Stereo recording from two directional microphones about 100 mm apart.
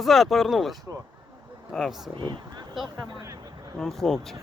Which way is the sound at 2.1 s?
50° right (ahead or behind).